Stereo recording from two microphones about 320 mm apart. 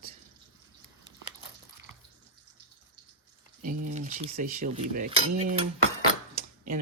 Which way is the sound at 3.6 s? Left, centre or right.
Right.